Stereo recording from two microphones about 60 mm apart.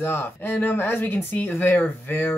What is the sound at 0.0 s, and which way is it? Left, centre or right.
Speech, left.